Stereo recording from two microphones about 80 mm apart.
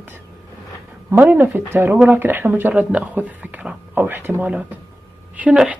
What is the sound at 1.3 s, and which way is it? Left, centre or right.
Speech, right.